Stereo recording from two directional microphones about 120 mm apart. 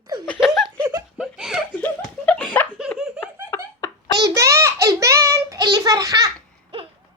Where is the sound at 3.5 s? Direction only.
25° left (ahead or behind).